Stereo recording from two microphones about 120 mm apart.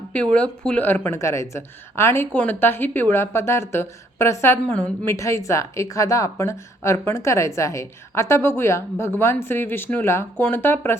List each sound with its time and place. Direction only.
0.3 s a woman's voice: 10° left (ahead or behind)